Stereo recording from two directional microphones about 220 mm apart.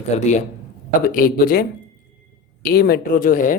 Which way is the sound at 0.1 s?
30° left (ahead or behind).